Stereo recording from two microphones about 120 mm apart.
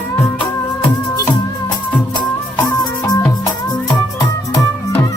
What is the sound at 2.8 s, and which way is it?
Music, 30° left (ahead or behind).